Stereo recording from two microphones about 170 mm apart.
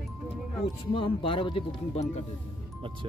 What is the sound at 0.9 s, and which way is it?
Speech, 30° left (ahead or behind).